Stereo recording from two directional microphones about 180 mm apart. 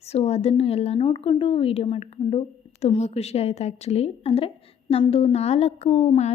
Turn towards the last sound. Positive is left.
turn(degrees=35)  # may be behind; listen again after turning